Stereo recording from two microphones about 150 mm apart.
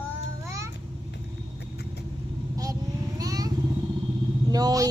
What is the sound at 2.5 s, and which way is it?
Vehicle, 25° right (ahead or behind).